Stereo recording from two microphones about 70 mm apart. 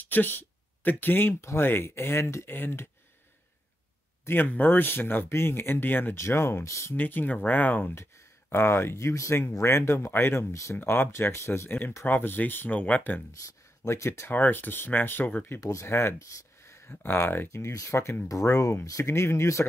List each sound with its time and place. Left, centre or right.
0.0 s speech: left
4.3 s speech: left
6.1 s speech: left
7.0 s speech: left
7.9 s speech: left
10.5 s speech: left
10.8 s speech: left
13.4 s speech: left
14.3 s speech: left
15.6 s speech: left